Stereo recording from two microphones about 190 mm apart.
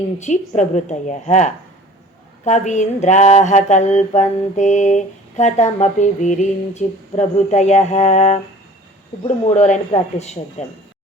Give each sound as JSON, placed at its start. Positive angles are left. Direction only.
{"t": 0.2, "sound": "mantra", "side_deg": 40}